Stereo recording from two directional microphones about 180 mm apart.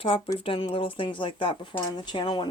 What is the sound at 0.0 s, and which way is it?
Speech, 30° left (ahead or behind).